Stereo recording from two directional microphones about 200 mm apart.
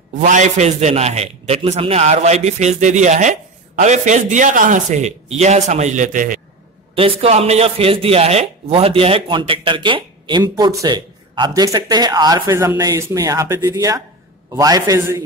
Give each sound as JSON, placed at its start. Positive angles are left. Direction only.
{"t": 0.2, "sound": "a man's voice", "side_deg": -35}
{"t": 7.0, "sound": "speech", "side_deg": -30}